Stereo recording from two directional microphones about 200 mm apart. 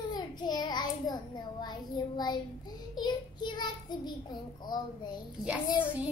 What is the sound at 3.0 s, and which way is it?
A child's voice, 20° left (ahead or behind).